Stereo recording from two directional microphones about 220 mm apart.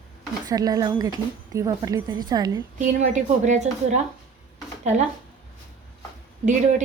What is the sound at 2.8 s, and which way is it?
A woman's voice, 35° right (ahead or behind).